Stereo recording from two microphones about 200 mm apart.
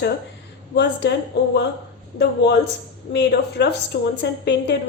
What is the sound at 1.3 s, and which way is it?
Speech, 55° left (ahead or behind).